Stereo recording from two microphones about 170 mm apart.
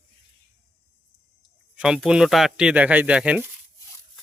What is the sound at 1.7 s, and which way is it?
Speech, 5° right (ahead or behind).